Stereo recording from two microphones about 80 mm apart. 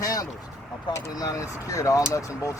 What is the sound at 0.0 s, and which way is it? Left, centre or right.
Vehicle, left.